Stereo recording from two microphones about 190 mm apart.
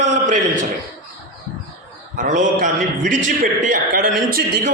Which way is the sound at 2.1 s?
40° right (ahead or behind).